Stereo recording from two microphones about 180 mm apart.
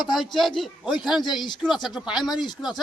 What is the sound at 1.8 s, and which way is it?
Speech, centre (ahead or behind).